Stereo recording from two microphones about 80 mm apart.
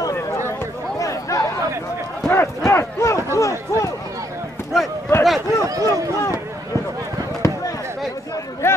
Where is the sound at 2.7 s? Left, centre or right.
Left.